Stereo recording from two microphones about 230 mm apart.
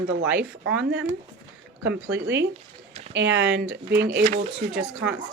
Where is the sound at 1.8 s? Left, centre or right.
Right.